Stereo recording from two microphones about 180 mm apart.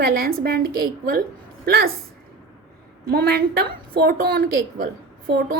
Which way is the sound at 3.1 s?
60° right (ahead or behind).